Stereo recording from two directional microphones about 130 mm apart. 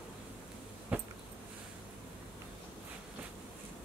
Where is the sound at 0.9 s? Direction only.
10° right (ahead or behind).